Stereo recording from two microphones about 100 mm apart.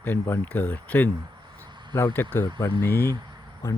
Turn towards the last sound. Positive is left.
turn(degrees=30)  # may be behind; listen again after turning